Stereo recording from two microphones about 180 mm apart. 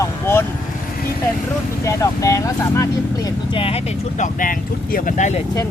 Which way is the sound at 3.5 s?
30° left (ahead or behind).